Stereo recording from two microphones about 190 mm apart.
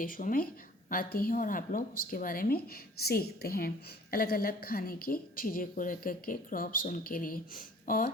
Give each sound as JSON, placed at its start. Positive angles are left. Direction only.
{"t": 0.0, "sound": "a woman's voice", "side_deg": 45}